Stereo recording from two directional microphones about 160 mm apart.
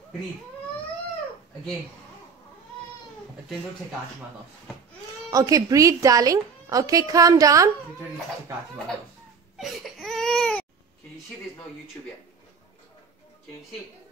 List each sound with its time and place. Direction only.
5.3 s a woman's voice: 20° right (ahead or behind)
9.6 s crying: centre (ahead or behind)